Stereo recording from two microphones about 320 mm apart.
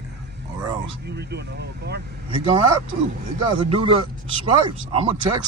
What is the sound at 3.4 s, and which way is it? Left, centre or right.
A man's voice, centre.